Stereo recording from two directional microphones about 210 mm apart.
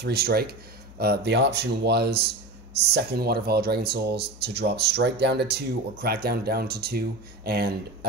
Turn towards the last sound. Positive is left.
turn(degrees=-50)  # may be behind; listen again after turning